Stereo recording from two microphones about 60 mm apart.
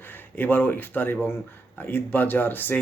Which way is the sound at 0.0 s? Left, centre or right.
Left.